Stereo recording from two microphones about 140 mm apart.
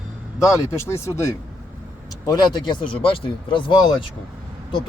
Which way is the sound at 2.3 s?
30° left (ahead or behind).